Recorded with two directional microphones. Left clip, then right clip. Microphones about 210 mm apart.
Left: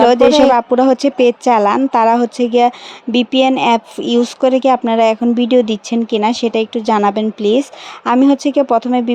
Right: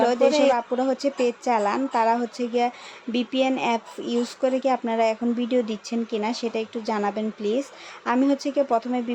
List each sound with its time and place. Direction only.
0.0 s speech: 40° left (ahead or behind)